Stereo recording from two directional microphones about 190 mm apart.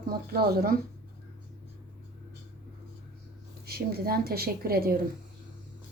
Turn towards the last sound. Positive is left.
turn(degrees=-50)  # may be behind; listen again after turning